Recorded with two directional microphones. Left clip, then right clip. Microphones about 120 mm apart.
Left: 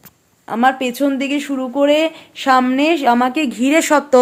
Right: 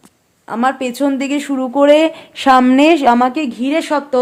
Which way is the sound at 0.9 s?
20° right (ahead or behind).